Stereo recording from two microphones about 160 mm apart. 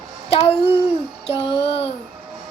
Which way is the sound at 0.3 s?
40° left (ahead or behind).